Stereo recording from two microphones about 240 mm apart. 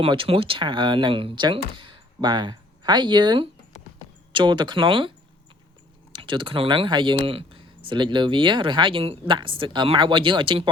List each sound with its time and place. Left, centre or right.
0.0 s speech: right
6.1 s speech: centre